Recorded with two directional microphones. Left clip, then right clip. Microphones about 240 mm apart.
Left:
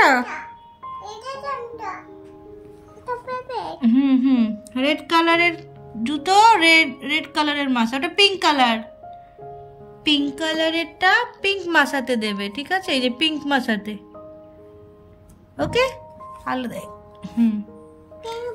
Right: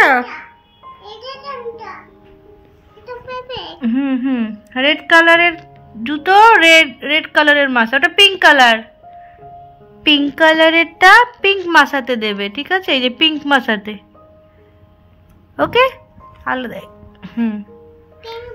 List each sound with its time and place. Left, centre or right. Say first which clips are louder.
0.0 s music: right 4 dB; centre
3.3 s a child's voice: right 1 dB; left
3.8 s a woman's voice: even; centre
10.3 s a woman's voice: right 12 dB; centre
15.5 s a woman's voice: right 8 dB; centre
16.4 s music: right 6 dB; centre